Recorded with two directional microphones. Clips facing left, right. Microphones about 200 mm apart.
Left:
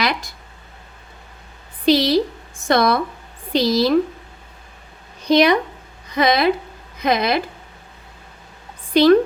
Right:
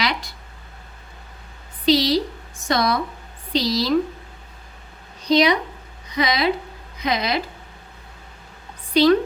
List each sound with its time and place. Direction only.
0.0 s speech: 50° left (ahead or behind)
1.8 s a woman's voice: 55° left (ahead or behind)
5.2 s a woman's voice: 55° left (ahead or behind)
8.9 s a woman's voice: 55° left (ahead or behind)